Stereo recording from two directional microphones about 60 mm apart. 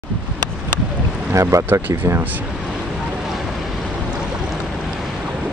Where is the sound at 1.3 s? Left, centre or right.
Right.